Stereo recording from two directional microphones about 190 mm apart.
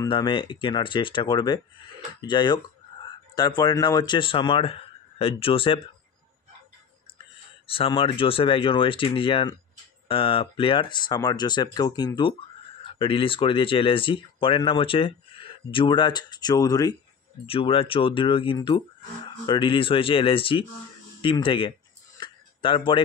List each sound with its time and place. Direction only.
0.0 s speech: 25° left (ahead or behind)
7.6 s speech: 30° left (ahead or behind)
22.2 s a sound: 25° left (ahead or behind)